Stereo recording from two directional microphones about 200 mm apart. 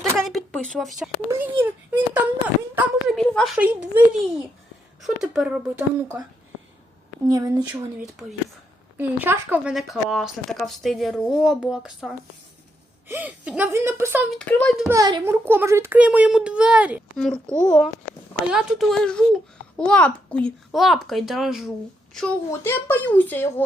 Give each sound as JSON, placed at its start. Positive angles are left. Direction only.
{"t": 0.2, "sound": "a child's voice", "side_deg": 0}
{"t": 7.3, "sound": "speech", "side_deg": -20}
{"t": 7.7, "sound": "a child's voice", "side_deg": -5}
{"t": 14.3, "sound": "speech", "side_deg": 5}
{"t": 14.8, "sound": "a child's voice", "side_deg": -20}